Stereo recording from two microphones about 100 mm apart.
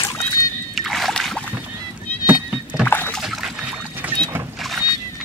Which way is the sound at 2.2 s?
15° right (ahead or behind).